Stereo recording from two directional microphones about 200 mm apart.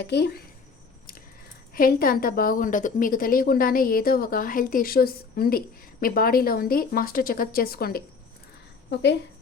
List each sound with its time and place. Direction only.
0.0 s a woman's voice: 55° left (ahead or behind)
1.7 s a woman's voice: 45° left (ahead or behind)